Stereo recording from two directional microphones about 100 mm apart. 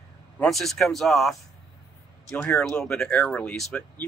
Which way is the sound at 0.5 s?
Centre (ahead or behind).